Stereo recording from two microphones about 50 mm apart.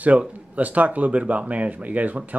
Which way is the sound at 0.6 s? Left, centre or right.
Right.